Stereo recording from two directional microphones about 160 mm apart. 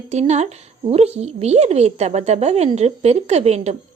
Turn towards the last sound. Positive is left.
turn(degrees=-40)  # may be behind; listen again after turning